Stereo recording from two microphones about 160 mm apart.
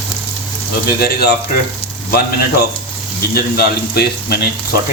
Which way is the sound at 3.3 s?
75° left (ahead or behind).